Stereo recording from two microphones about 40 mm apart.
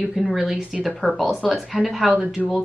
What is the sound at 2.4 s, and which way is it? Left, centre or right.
Speech, centre.